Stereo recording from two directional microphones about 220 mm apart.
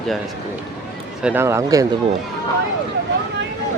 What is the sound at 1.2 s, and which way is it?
Speech, 10° right (ahead or behind).